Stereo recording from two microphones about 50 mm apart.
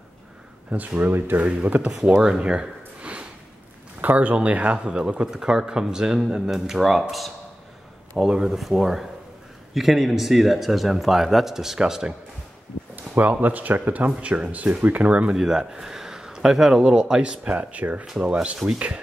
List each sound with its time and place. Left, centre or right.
0.7 s speech: right
1.4 s speech: right
2.1 s a sound: centre
4.0 s speech: right
4.7 s speech: centre
12.9 s speech: right
15.3 s speech: centre; by 18.6 s right